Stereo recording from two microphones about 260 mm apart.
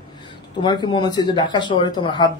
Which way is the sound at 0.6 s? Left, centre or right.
Centre.